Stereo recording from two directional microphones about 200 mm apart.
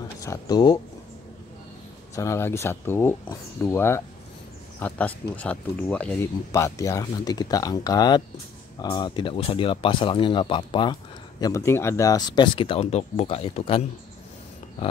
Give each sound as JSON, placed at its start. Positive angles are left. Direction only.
{"t": 0.2, "sound": "speech", "side_deg": 15}
{"t": 2.1, "sound": "speech", "side_deg": 15}